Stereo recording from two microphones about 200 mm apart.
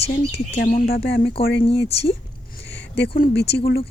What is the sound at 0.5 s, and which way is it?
Speech, 45° left (ahead or behind).